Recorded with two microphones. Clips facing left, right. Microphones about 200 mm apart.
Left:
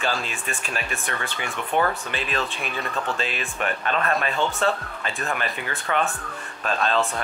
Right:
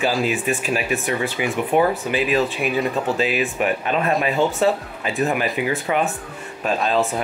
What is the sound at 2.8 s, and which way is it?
Speech, 15° right (ahead or behind).